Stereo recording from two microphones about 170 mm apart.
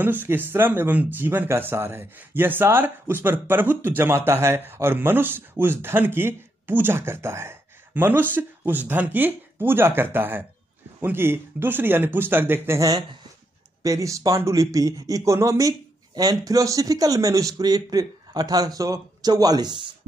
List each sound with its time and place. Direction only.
0.0 s speech: 10° right (ahead or behind)